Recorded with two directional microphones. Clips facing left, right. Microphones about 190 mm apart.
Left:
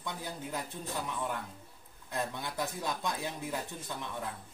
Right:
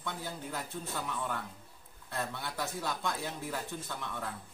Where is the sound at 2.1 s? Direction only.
15° left (ahead or behind).